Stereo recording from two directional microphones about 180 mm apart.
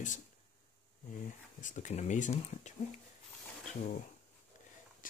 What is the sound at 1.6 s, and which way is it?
Speech, 45° left (ahead or behind).